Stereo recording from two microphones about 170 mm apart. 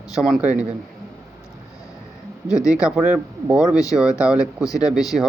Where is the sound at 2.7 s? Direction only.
5° right (ahead or behind).